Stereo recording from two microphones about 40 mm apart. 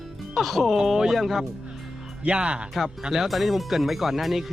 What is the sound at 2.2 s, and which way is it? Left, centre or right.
Speech, right.